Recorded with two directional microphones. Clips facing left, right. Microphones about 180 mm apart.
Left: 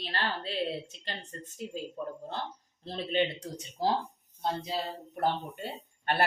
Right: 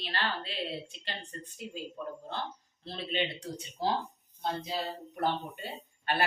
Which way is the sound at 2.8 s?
45° left (ahead or behind).